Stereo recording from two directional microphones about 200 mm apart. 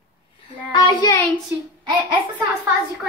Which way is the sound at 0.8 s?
20° left (ahead or behind).